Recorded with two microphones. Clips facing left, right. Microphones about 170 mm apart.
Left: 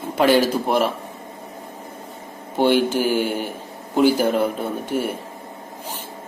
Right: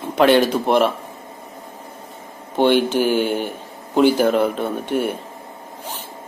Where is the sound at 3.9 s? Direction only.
55° right (ahead or behind).